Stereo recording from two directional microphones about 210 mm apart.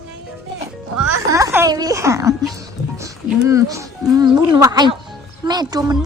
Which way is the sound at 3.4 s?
15° right (ahead or behind).